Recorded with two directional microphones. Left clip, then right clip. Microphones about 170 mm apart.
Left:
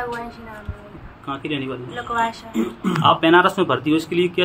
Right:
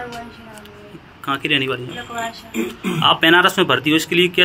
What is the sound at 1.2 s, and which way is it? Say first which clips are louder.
Speech: right 8 dB; 5° right (ahead or behind).